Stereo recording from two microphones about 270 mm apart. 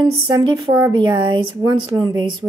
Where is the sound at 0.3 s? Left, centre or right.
Centre.